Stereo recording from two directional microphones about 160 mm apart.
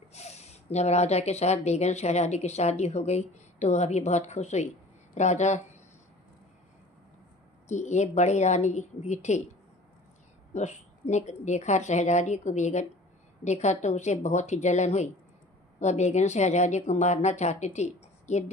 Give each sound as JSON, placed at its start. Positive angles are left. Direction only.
{"t": 0.1, "sound": "speech", "side_deg": 45}
{"t": 7.6, "sound": "speech", "side_deg": 45}
{"t": 10.5, "sound": "speech", "side_deg": 45}